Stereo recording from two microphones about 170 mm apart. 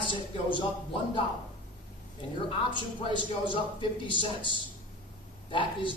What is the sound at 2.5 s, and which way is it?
A woman's voice, 30° left (ahead or behind).